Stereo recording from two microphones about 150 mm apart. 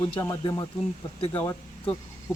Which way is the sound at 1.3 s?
15° left (ahead or behind).